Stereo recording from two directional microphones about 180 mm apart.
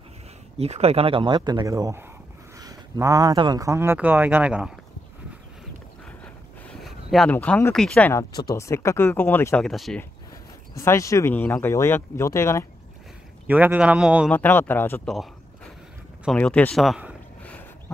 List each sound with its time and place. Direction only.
0.6 s speech: 35° right (ahead or behind); by 4.7 s 5° right (ahead or behind)
6.8 s speech: centre (ahead or behind)
8.1 s speech: 20° left (ahead or behind)
9.7 s speech: centre (ahead or behind)
10.8 s speech: 15° left (ahead or behind)
13.5 s speech: 10° right (ahead or behind)
14.3 s speech: 10° left (ahead or behind)
16.3 s a sound: 5° left (ahead or behind)